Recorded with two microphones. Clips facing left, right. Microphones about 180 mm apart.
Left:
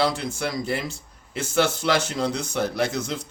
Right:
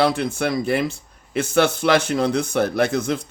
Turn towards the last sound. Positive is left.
turn(degrees=-55)  # may be behind; listen again after turning